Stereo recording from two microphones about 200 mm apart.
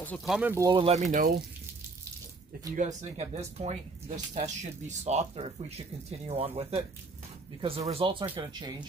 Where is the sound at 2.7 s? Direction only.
35° right (ahead or behind).